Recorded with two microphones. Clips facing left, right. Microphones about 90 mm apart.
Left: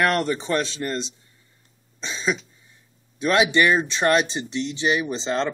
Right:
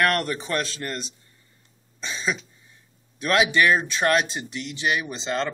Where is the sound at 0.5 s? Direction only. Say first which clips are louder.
Left 3 dB; 30° left (ahead or behind).